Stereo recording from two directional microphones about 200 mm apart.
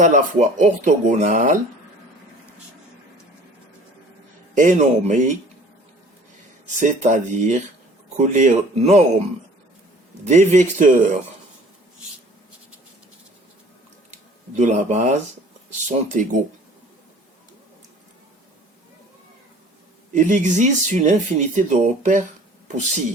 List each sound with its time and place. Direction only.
0.0 s speech: 35° right (ahead or behind)
4.5 s speech: 40° right (ahead or behind)
6.7 s speech: 40° right (ahead or behind)
10.2 s speech: 35° right (ahead or behind)
14.1 s speech: 35° right (ahead or behind)
20.1 s speech: 40° right (ahead or behind)